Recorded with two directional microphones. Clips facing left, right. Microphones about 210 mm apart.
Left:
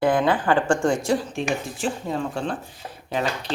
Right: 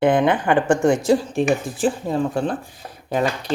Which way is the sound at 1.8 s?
40° right (ahead or behind).